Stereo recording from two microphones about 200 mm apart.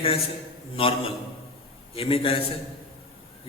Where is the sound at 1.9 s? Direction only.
30° left (ahead or behind).